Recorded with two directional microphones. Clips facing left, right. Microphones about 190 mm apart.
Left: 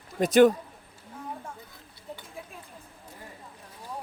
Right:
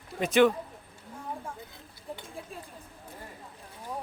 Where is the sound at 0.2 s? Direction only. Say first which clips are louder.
Left 4 dB; 40° left (ahead or behind).